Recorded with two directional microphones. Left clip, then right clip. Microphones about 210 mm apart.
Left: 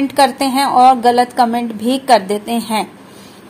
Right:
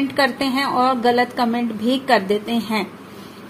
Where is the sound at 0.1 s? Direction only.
30° left (ahead or behind).